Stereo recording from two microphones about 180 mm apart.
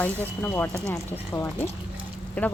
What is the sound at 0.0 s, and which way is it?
A woman's voice, 10° left (ahead or behind).